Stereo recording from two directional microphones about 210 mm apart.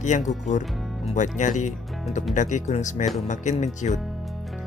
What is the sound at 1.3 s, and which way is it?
Speech, 35° left (ahead or behind).